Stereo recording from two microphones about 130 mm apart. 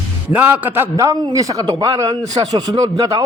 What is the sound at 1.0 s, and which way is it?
A man's voice, 25° right (ahead or behind).